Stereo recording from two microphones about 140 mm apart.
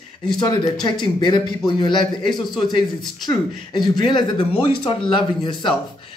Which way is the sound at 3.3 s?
30° left (ahead or behind).